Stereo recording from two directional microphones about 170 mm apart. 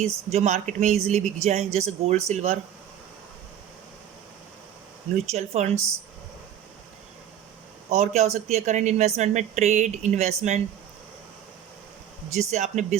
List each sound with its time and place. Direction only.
0.0 s speech: 40° right (ahead or behind)
5.1 s speech: 40° right (ahead or behind)
7.9 s speech: 40° right (ahead or behind)
12.3 s speech: 40° right (ahead or behind)